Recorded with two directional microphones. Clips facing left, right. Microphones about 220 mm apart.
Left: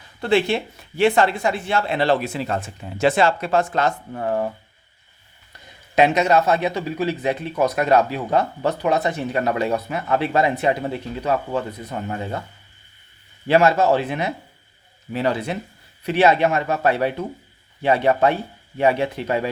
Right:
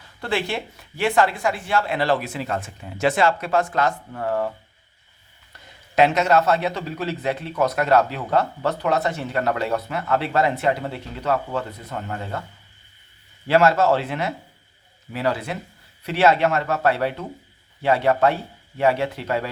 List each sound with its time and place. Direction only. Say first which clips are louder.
0.2 s speech: left 6 dB; 25° left (ahead or behind)
6.0 s a man's voice: left 1 dB; 15° left (ahead or behind)
13.5 s a man's voice: left 1 dB; 15° left (ahead or behind)